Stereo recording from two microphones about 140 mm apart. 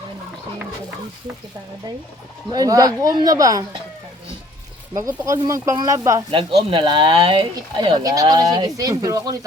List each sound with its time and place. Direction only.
2.5 s speech: 25° right (ahead or behind)
4.9 s speech: 20° right (ahead or behind)
6.3 s speech: 40° right (ahead or behind)